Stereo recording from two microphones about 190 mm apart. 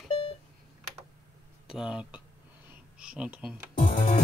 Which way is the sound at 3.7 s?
45° left (ahead or behind).